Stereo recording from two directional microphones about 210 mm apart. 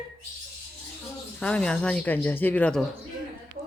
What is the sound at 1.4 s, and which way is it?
Speech, 5° left (ahead or behind).